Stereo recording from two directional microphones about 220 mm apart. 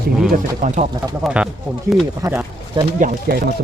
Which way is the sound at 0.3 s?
35° right (ahead or behind).